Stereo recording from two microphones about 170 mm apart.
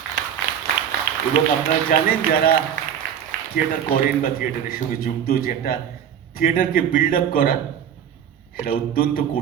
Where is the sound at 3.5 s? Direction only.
55° left (ahead or behind).